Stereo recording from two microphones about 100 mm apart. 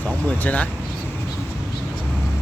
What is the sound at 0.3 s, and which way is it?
Speech, 15° left (ahead or behind).